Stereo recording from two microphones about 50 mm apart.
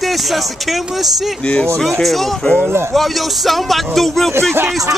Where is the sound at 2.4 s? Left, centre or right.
Left.